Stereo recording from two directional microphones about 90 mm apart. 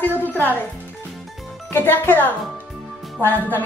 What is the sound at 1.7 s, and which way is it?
Speech, 25° left (ahead or behind).